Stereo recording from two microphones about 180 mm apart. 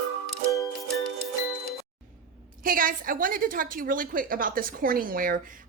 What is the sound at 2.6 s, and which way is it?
A woman's voice, 50° right (ahead or behind).